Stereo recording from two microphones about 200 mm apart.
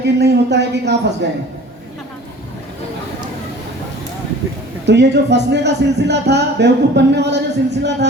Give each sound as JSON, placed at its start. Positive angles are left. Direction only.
{"t": 0.0, "sound": "speech", "side_deg": -55}
{"t": 4.9, "sound": "speech", "side_deg": -60}